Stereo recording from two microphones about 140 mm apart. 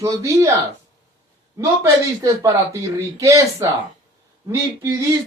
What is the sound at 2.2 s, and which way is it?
Speech, 20° right (ahead or behind).